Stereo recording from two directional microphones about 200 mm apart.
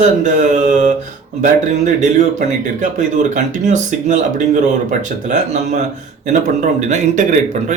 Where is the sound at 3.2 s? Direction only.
40° right (ahead or behind).